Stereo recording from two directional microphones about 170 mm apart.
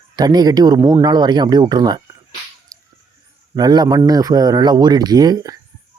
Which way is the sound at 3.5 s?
25° right (ahead or behind).